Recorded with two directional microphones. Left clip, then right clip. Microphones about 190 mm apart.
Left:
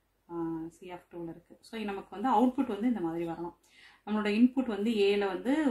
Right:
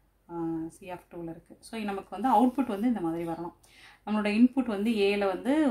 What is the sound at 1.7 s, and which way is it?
Speech, 35° right (ahead or behind).